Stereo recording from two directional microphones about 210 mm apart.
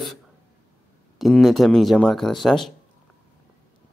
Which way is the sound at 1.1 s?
Centre (ahead or behind).